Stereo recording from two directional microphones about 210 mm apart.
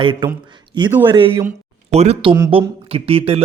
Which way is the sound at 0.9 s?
10° right (ahead or behind).